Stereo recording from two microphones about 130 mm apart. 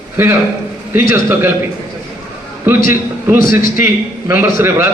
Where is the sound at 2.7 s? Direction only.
15° right (ahead or behind).